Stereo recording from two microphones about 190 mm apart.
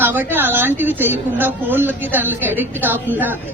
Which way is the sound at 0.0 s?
10° right (ahead or behind).